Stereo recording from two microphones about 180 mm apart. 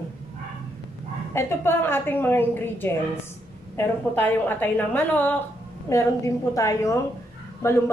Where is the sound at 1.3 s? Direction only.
15° left (ahead or behind).